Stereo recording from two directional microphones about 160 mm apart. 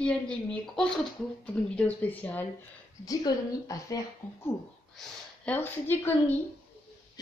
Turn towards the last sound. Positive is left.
turn(degrees=15)  # may be behind; listen again after turning